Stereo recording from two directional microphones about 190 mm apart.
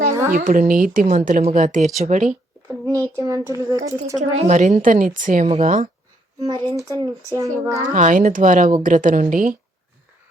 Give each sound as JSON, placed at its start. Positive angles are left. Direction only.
{"t": 0.3, "sound": "a woman's voice", "side_deg": -45}
{"t": 2.6, "sound": "a child's voice", "side_deg": -15}
{"t": 4.2, "sound": "a woman's voice", "side_deg": -40}
{"t": 6.4, "sound": "a child's voice", "side_deg": -20}
{"t": 7.9, "sound": "a woman's voice", "side_deg": -40}